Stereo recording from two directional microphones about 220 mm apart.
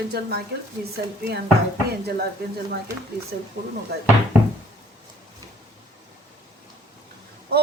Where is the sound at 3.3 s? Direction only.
40° right (ahead or behind).